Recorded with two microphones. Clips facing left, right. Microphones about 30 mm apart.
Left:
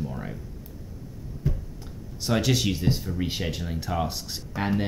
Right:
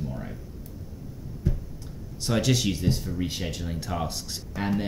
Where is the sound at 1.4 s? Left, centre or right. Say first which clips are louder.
Left 1 dB; centre.